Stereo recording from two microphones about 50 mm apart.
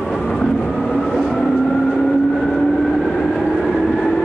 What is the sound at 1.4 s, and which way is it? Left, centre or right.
Train, centre.